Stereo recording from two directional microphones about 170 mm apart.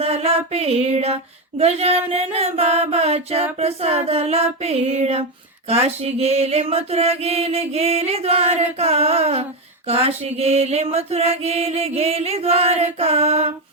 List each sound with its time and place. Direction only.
0.0 s mantra: 35° right (ahead or behind)